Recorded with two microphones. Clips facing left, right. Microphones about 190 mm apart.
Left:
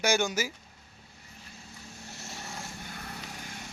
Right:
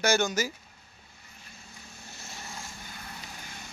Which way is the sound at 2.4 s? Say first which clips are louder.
Left 2 dB; 65° left (ahead or behind).